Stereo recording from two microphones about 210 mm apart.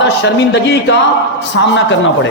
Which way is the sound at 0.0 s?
55° left (ahead or behind).